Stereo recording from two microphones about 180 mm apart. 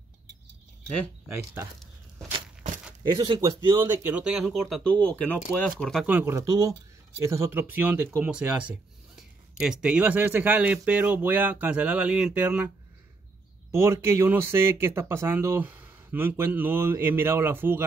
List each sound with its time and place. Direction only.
1.3 s speech: 15° right (ahead or behind)
3.0 s speech: 25° right (ahead or behind); by 6.0 s 5° left (ahead or behind)
6.0 s speech: 10° right (ahead or behind)